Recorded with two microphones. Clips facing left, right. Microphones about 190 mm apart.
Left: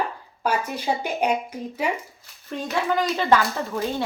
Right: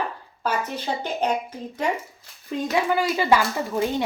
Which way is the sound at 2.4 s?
10° right (ahead or behind).